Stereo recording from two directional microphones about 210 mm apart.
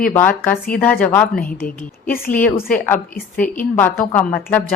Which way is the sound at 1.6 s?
40° left (ahead or behind).